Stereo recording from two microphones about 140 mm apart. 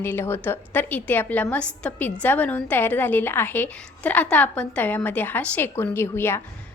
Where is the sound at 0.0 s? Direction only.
15° left (ahead or behind).